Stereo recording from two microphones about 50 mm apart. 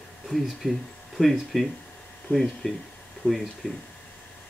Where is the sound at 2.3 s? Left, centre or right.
Left.